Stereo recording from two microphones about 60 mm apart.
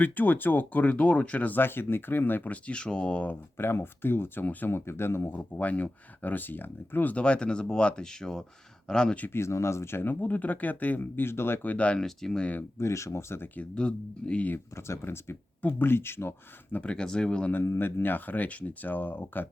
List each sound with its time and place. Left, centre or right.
0.0 s speech: left
3.2 s speech: left
5.3 s speech: left
7.2 s speech: centre
9.3 s speech: left
11.6 s speech: left
12.0 s speech: centre
12.8 s speech: left
13.6 s speech: centre
14.5 s speech: left
16.8 s speech: centre
17.5 s speech: left